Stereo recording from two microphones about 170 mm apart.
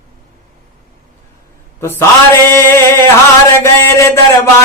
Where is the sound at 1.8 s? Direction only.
15° left (ahead or behind).